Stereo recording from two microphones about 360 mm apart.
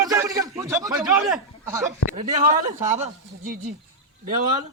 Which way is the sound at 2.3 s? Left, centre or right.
Centre.